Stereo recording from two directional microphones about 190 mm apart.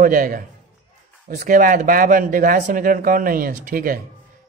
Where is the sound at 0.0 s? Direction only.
45° right (ahead or behind).